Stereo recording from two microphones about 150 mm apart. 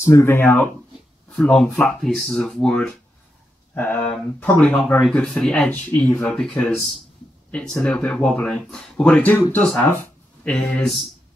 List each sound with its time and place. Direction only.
0.0 s speech: 15° left (ahead or behind)
1.3 s speech: 5° left (ahead or behind)